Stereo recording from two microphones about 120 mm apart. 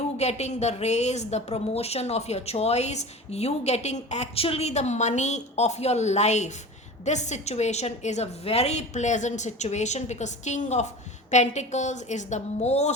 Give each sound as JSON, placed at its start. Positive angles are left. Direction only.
{"t": 0.2, "sound": "a woman's voice", "side_deg": 65}